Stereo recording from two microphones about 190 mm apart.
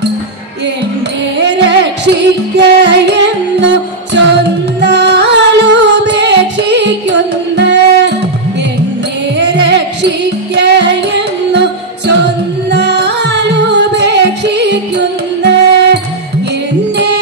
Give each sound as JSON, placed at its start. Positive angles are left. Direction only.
{"t": 1.4, "sound": "music", "side_deg": -65}
{"t": 9.4, "sound": "music", "side_deg": -65}
{"t": 12.7, "sound": "music", "side_deg": -65}